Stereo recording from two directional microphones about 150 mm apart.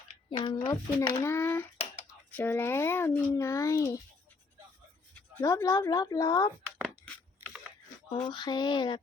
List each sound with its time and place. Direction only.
0.1 s a sound: 45° left (ahead or behind)
0.4 s a child's voice: 30° left (ahead or behind)
5.4 s a child's voice: 20° left (ahead or behind)
8.2 s speech: 30° left (ahead or behind)